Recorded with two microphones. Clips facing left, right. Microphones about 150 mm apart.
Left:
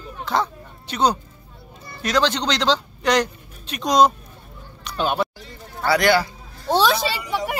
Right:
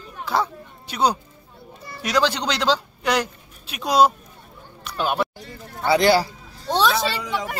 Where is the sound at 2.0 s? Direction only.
10° right (ahead or behind).